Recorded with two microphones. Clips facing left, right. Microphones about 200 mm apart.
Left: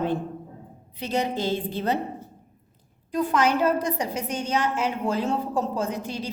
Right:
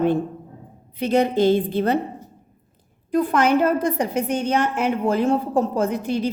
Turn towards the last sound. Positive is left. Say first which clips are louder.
# right 7 dB
turn(degrees=-55)  # may be behind; listen again after turning